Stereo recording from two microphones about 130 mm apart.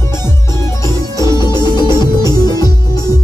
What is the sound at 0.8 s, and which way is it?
Music, 30° left (ahead or behind).